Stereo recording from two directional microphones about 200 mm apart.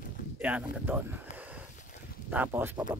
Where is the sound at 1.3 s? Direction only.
5° right (ahead or behind).